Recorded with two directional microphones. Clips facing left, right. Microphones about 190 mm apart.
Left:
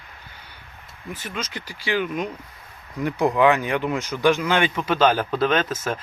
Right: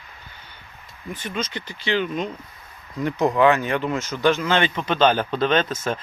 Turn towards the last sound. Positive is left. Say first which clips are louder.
# right 1 dB
turn(degrees=5)  # may be behind; listen again after turning